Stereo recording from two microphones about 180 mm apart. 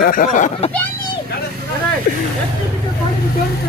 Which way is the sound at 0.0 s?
50° left (ahead or behind).